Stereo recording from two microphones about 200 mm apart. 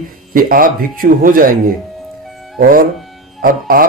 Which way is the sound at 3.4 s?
45° right (ahead or behind).